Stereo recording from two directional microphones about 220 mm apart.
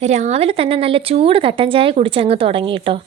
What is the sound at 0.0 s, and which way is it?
A woman's voice, 30° right (ahead or behind).